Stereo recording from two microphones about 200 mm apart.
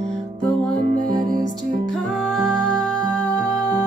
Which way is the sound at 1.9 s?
Centre (ahead or behind).